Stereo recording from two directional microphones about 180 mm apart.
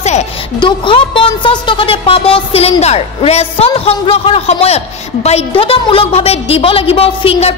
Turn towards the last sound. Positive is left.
turn(degrees=30)  # may be behind; listen again after turning